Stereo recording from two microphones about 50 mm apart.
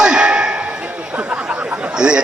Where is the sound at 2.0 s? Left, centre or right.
Centre.